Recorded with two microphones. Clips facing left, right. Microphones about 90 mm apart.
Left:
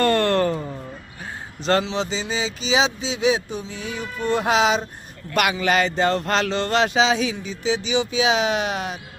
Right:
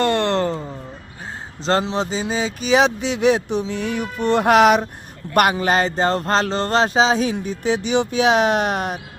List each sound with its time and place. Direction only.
0.0 s a sound: 20° right (ahead or behind)
1.8 s speech: 40° right (ahead or behind); by 4.9 s 60° right (ahead or behind)
5.3 s speech: 45° right (ahead or behind)
7.3 s speech: 55° right (ahead or behind)